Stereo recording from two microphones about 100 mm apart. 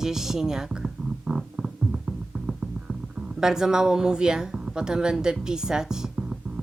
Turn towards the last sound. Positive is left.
turn(degrees=-5)  # may be behind; listen again after turning